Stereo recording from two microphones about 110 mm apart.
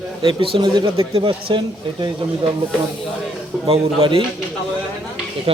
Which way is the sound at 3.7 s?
55° right (ahead or behind).